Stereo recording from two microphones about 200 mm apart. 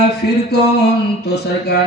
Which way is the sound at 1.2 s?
55° left (ahead or behind).